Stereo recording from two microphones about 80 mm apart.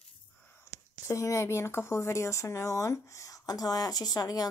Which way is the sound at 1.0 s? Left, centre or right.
Left.